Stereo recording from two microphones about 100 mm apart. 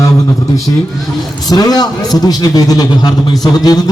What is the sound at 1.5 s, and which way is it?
A man's voice, 40° left (ahead or behind).